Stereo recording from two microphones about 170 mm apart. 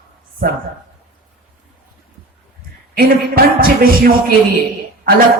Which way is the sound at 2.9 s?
60° right (ahead or behind).